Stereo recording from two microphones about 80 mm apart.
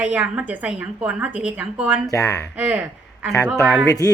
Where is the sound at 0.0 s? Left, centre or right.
Centre.